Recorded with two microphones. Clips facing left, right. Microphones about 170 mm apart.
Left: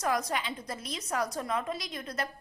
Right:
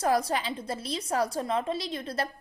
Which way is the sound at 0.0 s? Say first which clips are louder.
Right 4 dB; 30° right (ahead or behind).